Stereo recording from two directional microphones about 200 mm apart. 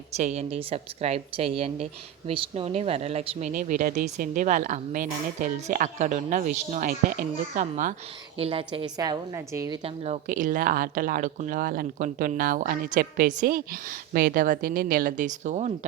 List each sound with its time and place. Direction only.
0.2 s a woman's voice: 35° right (ahead or behind)
8.4 s a woman's voice: 30° right (ahead or behind)
9.8 s speech: 30° right (ahead or behind)